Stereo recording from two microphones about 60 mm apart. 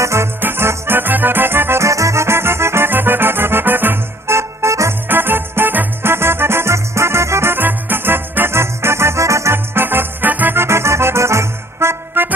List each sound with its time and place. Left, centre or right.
0.0 s music: right
0.4 s music: right
1.9 s music: right
5.0 s music: right
9.8 s music: right